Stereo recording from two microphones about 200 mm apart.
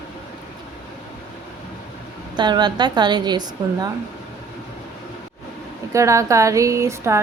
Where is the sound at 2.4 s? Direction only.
20° right (ahead or behind).